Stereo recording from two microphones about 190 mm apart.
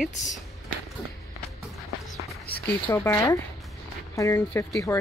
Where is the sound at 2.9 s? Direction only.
15° left (ahead or behind).